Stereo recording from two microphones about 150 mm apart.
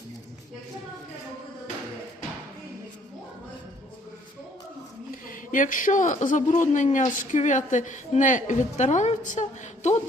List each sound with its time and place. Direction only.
5.3 s a man's voice: 60° left (ahead or behind)